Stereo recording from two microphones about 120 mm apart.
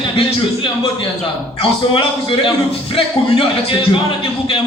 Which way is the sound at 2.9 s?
50° left (ahead or behind).